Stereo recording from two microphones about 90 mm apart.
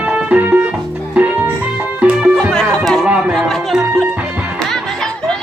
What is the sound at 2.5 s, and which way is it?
Music, 10° left (ahead or behind).